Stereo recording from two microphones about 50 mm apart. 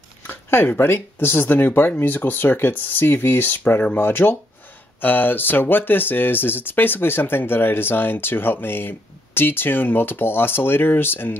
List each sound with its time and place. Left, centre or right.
0.3 s speech: left